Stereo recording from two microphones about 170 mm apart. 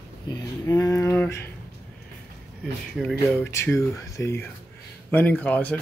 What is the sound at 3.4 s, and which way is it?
Speech, 15° left (ahead or behind).